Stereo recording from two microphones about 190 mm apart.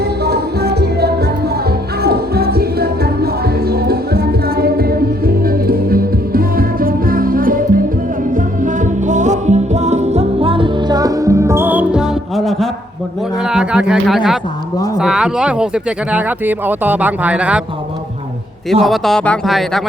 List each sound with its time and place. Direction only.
0.3 s music: 55° right (ahead or behind); by 12.6 s centre (ahead or behind)
13.4 s a sound: 5° right (ahead or behind)
14.9 s speech: 5° right (ahead or behind)
18.7 s speech: centre (ahead or behind)